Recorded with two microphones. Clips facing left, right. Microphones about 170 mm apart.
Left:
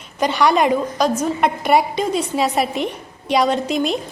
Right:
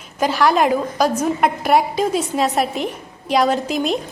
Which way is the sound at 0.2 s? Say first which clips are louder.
Even; centre (ahead or behind).